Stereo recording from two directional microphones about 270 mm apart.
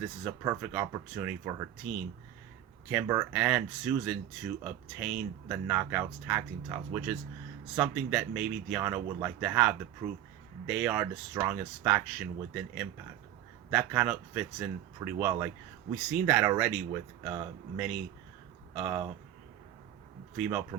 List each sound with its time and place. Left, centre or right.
0.3 s speech: centre
20.3 s speech: centre